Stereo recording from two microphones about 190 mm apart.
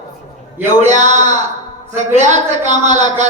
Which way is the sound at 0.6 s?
40° right (ahead or behind).